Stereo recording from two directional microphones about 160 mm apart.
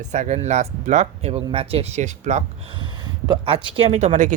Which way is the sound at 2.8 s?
30° right (ahead or behind).